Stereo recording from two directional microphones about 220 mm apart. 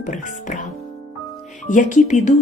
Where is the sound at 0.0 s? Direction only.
35° left (ahead or behind).